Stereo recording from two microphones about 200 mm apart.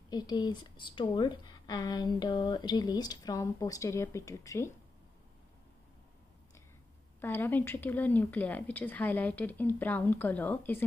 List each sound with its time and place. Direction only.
0.1 s speech: 20° left (ahead or behind)
7.2 s speech: 10° left (ahead or behind)